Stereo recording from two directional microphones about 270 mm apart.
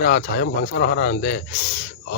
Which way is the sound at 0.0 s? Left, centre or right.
Left.